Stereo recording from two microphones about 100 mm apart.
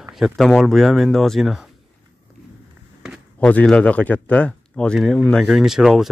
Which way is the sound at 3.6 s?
10° left (ahead or behind).